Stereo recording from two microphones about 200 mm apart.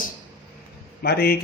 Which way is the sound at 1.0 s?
50° left (ahead or behind).